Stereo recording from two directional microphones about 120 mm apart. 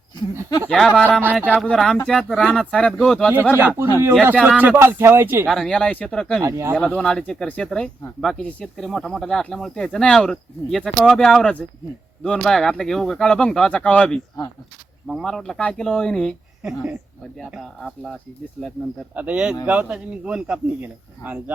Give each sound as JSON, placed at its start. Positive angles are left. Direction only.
{"t": 0.7, "sound": "speech", "side_deg": 5}
{"t": 1.2, "sound": "speech", "side_deg": -15}
{"t": 1.6, "sound": "speech", "side_deg": 5}
{"t": 3.5, "sound": "speech", "side_deg": -20}
{"t": 5.5, "sound": "speech", "side_deg": 5}
{"t": 6.4, "sound": "speech", "side_deg": -25}
{"t": 6.7, "sound": "speech", "side_deg": 5}
{"t": 16.6, "sound": "speech", "side_deg": -5}
{"t": 17.6, "sound": "speech", "side_deg": 5}
{"t": 19.1, "sound": "speech", "side_deg": -10}